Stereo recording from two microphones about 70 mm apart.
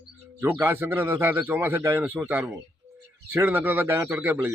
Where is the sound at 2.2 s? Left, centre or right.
Right.